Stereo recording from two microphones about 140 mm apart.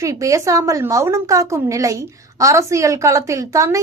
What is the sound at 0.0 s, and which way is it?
A woman's voice, 20° right (ahead or behind).